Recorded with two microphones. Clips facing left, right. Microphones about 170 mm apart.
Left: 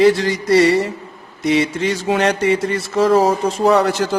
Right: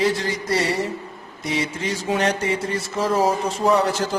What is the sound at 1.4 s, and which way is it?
Speech, 75° left (ahead or behind).